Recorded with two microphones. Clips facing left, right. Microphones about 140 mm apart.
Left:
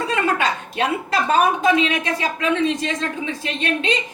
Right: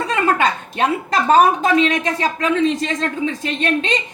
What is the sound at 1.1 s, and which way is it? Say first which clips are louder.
Speech: right 5 dB; 40° right (ahead or behind).